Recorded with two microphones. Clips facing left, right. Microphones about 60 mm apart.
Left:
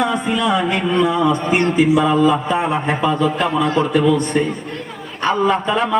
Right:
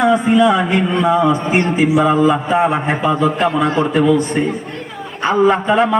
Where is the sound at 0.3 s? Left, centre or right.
Right.